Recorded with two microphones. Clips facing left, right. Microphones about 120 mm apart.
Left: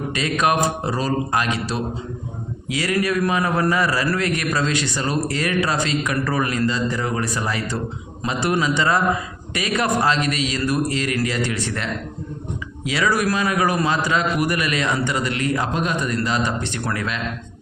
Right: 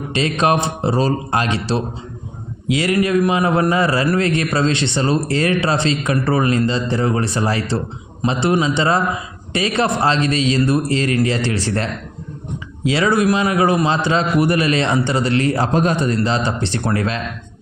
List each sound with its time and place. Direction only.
0.1 s a man's voice: 25° right (ahead or behind)
12.8 s a man's voice: 25° right (ahead or behind)